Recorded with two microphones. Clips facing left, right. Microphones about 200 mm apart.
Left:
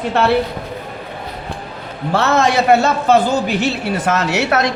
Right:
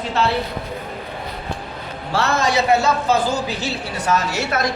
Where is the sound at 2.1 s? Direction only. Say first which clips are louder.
Left 4 dB; 60° left (ahead or behind).